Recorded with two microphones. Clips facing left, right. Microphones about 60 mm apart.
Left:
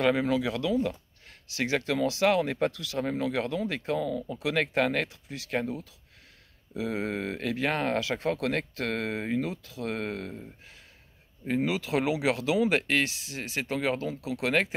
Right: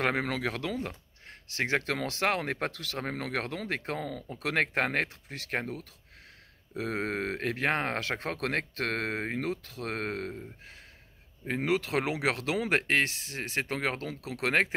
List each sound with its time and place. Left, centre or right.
0.0 s speech: right
6.8 s speech: right
11.6 s speech: right